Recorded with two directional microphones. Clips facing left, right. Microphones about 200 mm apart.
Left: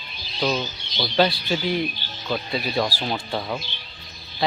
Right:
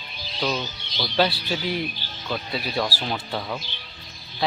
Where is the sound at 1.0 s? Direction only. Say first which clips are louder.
Left 2 dB; 5° right (ahead or behind).